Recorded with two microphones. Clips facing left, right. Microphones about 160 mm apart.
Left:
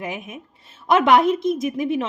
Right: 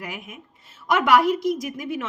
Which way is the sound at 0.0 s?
25° left (ahead or behind).